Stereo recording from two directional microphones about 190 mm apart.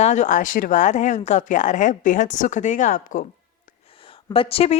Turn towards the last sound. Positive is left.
turn(degrees=30)  # may be behind; listen again after turning